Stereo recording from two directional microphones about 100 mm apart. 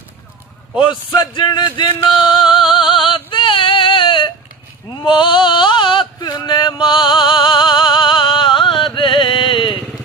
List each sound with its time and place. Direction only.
0.7 s speech: 50° left (ahead or behind)
2.3 s female singing: 55° left (ahead or behind)
4.9 s male singing: 50° left (ahead or behind)